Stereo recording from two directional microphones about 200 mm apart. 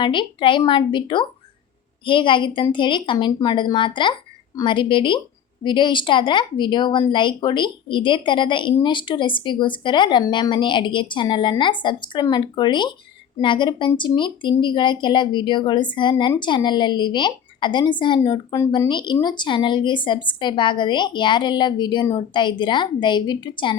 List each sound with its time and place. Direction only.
0.0 s a woman's voice: 25° left (ahead or behind)